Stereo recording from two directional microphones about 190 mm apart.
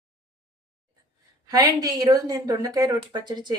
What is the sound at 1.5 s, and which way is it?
Speech, 20° right (ahead or behind).